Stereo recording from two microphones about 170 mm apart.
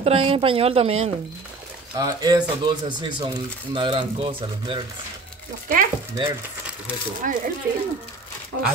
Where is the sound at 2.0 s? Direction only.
25° right (ahead or behind).